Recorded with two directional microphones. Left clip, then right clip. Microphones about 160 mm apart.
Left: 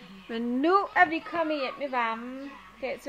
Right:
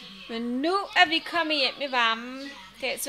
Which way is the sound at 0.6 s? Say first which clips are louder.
Even; 15° left (ahead or behind).